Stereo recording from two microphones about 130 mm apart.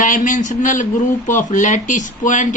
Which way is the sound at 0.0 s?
75° left (ahead or behind).